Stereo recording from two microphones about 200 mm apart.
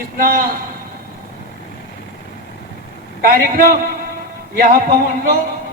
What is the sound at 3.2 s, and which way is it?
Speech, 45° right (ahead or behind).